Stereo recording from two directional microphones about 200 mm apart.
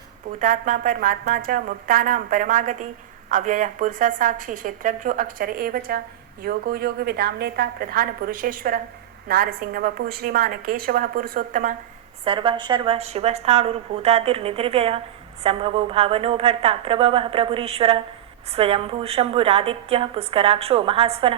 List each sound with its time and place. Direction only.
0.3 s a woman's voice: 40° right (ahead or behind)
12.2 s a woman's voice: 25° right (ahead or behind)